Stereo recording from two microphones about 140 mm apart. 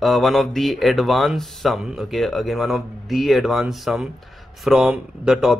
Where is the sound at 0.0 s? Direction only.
Centre (ahead or behind).